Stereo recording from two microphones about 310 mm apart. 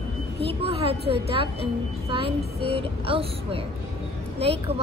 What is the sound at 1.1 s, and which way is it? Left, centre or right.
A woman's voice, centre.